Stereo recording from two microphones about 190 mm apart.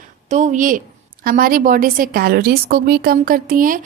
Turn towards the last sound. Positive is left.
turn(degrees=-45)  # may be behind; listen again after turning